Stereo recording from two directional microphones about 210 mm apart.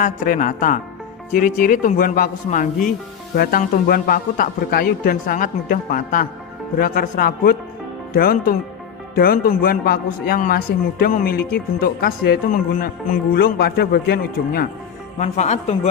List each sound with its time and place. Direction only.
0.0 s a man's voice: 40° left (ahead or behind)
15.2 s speech: 35° left (ahead or behind)